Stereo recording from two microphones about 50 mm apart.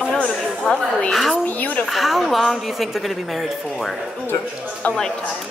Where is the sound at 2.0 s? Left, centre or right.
Centre.